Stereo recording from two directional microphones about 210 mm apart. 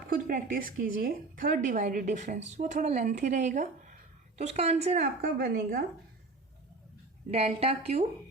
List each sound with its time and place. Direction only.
0.1 s a woman's voice: 40° right (ahead or behind)
7.3 s a woman's voice: 30° right (ahead or behind)